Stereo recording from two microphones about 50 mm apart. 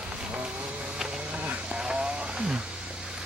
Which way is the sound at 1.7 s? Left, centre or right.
Centre.